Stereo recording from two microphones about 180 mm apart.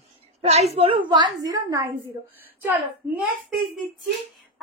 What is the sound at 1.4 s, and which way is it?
Speech, 20° right (ahead or behind).